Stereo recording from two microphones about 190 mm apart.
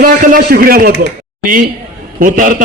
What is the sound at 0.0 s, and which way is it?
Speech, 50° right (ahead or behind).